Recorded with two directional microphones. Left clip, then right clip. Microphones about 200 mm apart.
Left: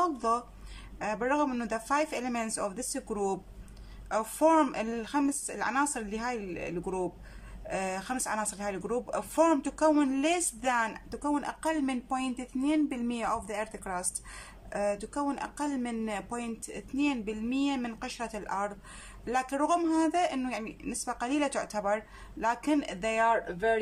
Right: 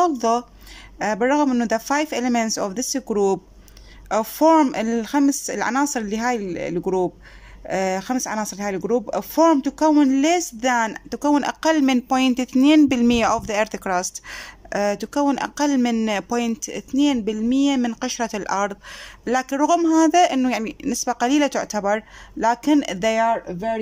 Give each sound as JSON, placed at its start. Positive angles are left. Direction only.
{"t": 0.0, "sound": "speech", "side_deg": -35}